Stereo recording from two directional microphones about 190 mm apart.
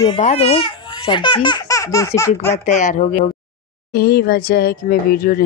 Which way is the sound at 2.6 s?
45° left (ahead or behind).